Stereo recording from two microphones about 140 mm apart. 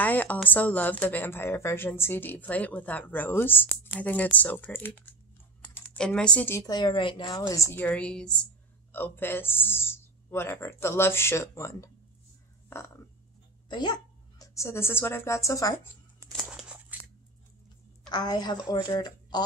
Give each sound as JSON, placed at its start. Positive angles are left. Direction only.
{"t": 0.0, "sound": "a woman's voice", "side_deg": 10}
{"t": 6.6, "sound": "a woman's voice", "side_deg": 30}
{"t": 13.7, "sound": "speech", "side_deg": 30}
{"t": 14.4, "sound": "a woman's voice", "side_deg": 20}
{"t": 16.4, "sound": "a sound", "side_deg": -5}
{"t": 18.1, "sound": "a woman's voice", "side_deg": 30}